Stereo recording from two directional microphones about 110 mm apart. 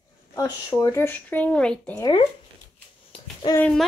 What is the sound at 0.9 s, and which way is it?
Speech, 15° left (ahead or behind).